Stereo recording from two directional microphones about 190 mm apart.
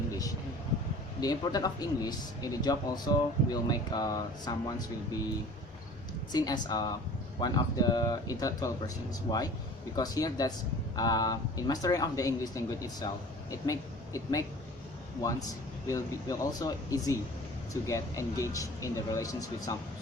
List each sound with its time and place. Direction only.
1.2 s speech: 20° left (ahead or behind)
6.3 s a woman's voice: 20° left (ahead or behind)
15.9 s speech: 15° left (ahead or behind)